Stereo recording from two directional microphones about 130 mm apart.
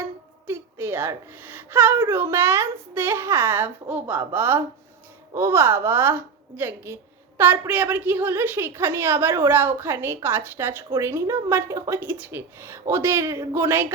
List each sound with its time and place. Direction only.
0.4 s a woman's voice: 15° right (ahead or behind)